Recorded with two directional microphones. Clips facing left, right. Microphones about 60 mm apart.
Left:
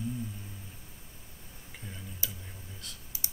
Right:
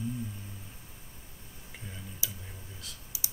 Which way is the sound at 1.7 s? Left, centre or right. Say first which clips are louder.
Even; centre.